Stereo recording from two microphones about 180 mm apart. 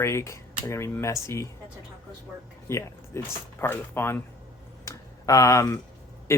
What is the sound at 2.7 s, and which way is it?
Speech, 15° left (ahead or behind).